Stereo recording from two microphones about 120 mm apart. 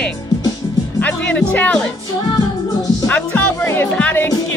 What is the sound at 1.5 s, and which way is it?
Speech, 10° left (ahead or behind).